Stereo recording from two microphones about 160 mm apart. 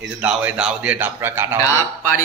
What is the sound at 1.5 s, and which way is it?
Speech, 20° left (ahead or behind).